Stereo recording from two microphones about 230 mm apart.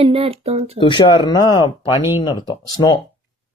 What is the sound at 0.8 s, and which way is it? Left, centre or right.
Speech, left.